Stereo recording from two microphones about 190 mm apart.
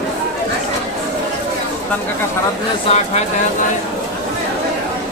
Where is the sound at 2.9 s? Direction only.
35° left (ahead or behind).